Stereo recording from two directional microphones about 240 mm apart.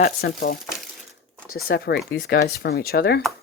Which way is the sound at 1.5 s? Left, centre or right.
Left.